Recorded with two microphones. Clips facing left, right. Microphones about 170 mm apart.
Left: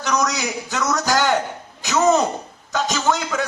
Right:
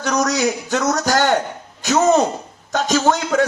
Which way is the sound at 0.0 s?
50° right (ahead or behind).